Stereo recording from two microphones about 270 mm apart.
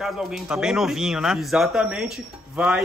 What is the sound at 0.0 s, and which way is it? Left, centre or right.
Speech, centre.